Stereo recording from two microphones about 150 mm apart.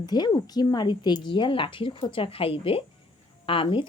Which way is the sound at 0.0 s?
25° left (ahead or behind).